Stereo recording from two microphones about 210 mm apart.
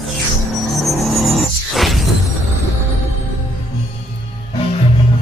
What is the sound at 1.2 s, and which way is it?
Music, centre (ahead or behind).